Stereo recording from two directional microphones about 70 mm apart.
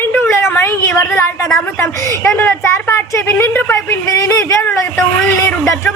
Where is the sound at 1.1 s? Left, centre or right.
Left.